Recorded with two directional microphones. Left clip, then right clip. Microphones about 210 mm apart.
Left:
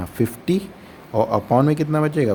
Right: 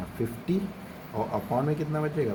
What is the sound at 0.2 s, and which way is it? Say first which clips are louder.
Speech: left 9 dB; 60° left (ahead or behind).